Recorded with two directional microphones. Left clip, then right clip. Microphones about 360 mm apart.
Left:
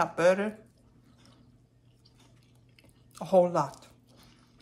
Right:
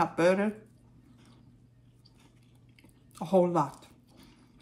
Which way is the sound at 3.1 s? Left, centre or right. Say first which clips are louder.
Left 2 dB; centre.